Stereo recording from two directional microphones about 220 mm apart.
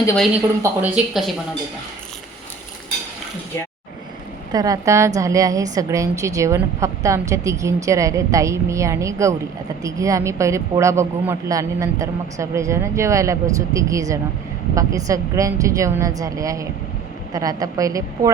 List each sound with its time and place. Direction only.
0.6 s a woman's voice: 5° right (ahead or behind)
4.5 s a woman's voice: 15° right (ahead or behind)